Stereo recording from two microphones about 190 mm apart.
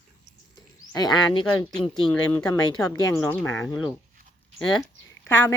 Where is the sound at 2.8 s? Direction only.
20° left (ahead or behind).